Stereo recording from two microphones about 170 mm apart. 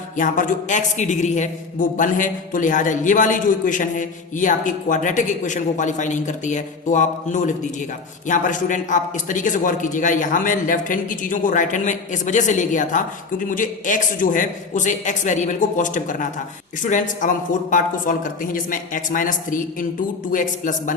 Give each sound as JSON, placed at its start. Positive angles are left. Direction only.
{"t": 0.2, "sound": "a man's voice", "side_deg": 50}